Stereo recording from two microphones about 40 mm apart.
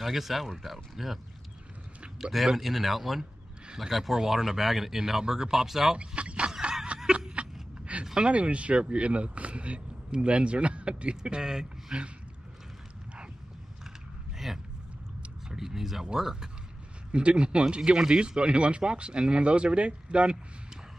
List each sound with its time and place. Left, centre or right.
0.0 s speech: centre
2.3 s speech: centre
5.9 s speech: right
7.1 s a sound: right
8.0 s speech: right
14.5 s a sound: centre
16.1 s speech: centre
17.1 s speech: right
17.9 s speech: centre
18.2 s speech: right